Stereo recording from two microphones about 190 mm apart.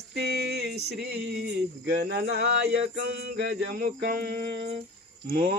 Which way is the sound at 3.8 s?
50° right (ahead or behind).